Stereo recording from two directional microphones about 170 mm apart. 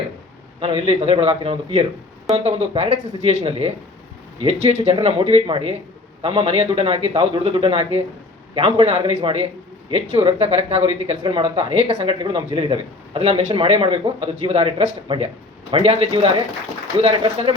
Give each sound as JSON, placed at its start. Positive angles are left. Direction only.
{"t": 0.6, "sound": "speech", "side_deg": -35}
{"t": 4.8, "sound": "speech", "side_deg": -35}